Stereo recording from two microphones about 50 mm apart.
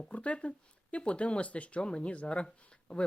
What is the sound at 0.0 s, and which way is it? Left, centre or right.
Speech, left.